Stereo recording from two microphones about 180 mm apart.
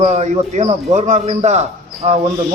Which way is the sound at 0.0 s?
40° right (ahead or behind).